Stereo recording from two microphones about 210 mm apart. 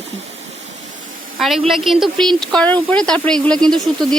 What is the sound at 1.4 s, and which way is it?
A woman's voice, centre (ahead or behind).